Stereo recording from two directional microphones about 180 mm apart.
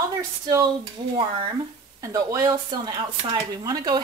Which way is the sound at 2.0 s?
20° right (ahead or behind).